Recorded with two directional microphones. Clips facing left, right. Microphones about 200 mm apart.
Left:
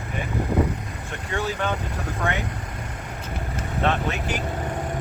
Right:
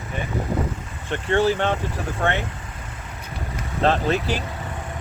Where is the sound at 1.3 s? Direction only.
30° right (ahead or behind).